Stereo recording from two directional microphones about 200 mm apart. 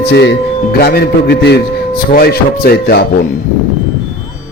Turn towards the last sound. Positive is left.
turn(degrees=50)  # may be behind; listen again after turning